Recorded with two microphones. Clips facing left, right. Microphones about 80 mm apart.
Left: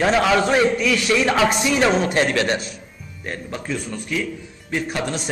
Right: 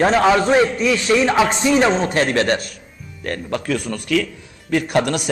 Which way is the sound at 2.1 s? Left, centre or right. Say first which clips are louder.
Right 2 dB; right.